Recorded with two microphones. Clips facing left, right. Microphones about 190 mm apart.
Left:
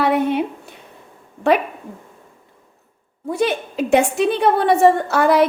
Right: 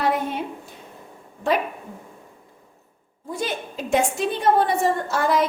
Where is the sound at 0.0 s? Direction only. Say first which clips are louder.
Left 6 dB; 65° left (ahead or behind).